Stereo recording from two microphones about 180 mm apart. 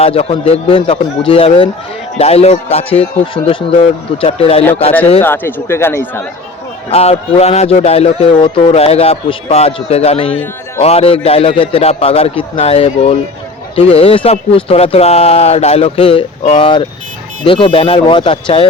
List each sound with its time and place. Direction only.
0.0 s a man's voice: 35° left (ahead or behind)
5.2 s speech: 10° left (ahead or behind)
6.9 s a man's voice: 35° left (ahead or behind)